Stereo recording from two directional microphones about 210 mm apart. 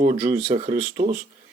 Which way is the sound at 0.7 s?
40° right (ahead or behind).